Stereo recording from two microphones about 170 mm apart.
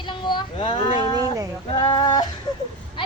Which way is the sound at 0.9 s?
25° right (ahead or behind).